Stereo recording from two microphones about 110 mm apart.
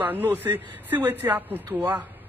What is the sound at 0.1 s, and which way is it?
A man's voice, 15° right (ahead or behind).